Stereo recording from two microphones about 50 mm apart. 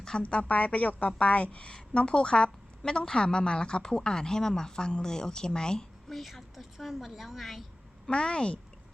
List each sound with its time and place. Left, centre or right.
0.2 s a woman's voice: left
6.1 s speech: centre
8.1 s speech: centre